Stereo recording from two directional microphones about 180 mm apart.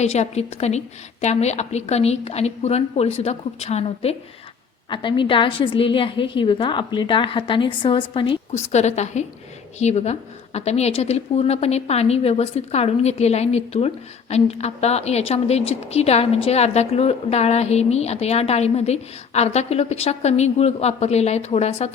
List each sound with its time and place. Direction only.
0.0 s a woman's voice: 35° left (ahead or behind)